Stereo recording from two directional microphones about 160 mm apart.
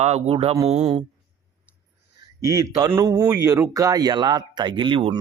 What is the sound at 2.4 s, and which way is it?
Speech, 20° right (ahead or behind).